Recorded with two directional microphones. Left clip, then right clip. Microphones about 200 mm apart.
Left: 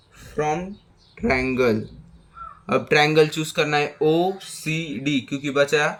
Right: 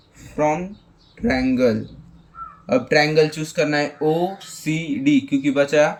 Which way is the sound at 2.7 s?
55° left (ahead or behind).